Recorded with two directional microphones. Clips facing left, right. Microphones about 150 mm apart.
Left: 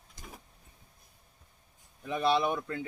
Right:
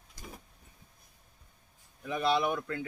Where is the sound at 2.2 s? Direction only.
25° left (ahead or behind).